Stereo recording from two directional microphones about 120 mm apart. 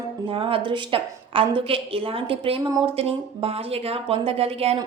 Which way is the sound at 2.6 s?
30° right (ahead or behind).